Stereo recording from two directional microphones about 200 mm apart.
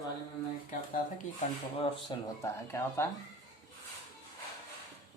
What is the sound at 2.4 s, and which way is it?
Speech, 15° left (ahead or behind).